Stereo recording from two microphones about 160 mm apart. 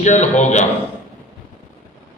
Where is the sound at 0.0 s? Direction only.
45° left (ahead or behind).